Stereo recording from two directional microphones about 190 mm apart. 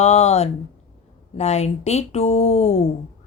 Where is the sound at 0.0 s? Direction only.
35° left (ahead or behind).